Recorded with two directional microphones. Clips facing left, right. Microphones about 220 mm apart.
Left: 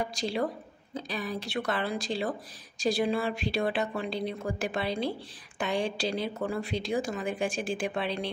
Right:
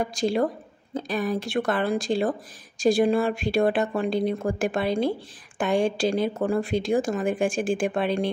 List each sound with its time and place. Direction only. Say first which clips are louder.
0.0 s a woman's voice: right 7 dB; 50° right (ahead or behind)